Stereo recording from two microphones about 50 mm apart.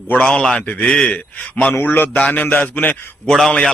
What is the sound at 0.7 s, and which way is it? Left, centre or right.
A man's voice, left.